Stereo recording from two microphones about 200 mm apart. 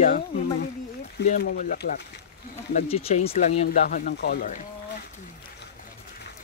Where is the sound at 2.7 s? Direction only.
30° left (ahead or behind).